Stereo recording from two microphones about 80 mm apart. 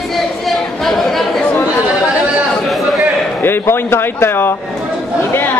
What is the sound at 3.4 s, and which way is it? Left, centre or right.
A woman's voice, left.